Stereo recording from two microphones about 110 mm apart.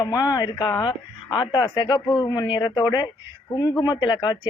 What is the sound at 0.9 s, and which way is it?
Speech, 45° left (ahead or behind).